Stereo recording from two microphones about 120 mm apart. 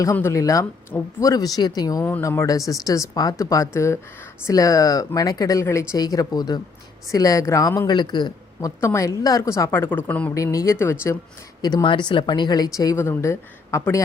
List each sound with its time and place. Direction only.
0.0 s speech: 20° left (ahead or behind)
2.0 s speech: 20° left (ahead or behind)
7.9 s a man's voice: 35° left (ahead or behind)
8.8 s speech: 25° left (ahead or behind)
10.3 s speech: 25° left (ahead or behind)
11.6 s speech: 35° left (ahead or behind)